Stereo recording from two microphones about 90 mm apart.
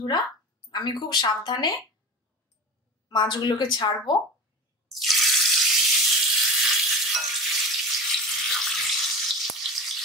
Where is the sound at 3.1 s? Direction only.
55° left (ahead or behind).